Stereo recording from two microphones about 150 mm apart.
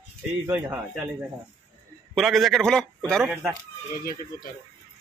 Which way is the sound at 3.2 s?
10° right (ahead or behind).